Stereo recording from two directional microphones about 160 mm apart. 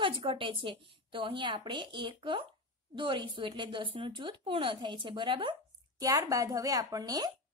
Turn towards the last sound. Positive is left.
turn(degrees=-25)  # may be behind; listen again after turning